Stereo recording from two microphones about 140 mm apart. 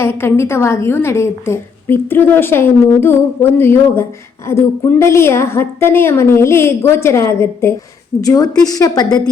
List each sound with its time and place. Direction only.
0.0 s a woman's voice: 20° left (ahead or behind)